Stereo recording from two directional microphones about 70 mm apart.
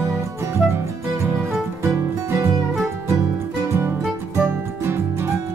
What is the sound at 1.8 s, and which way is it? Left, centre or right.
Music, right.